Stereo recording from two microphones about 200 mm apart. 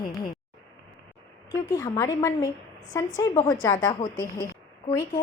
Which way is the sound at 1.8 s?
15° left (ahead or behind).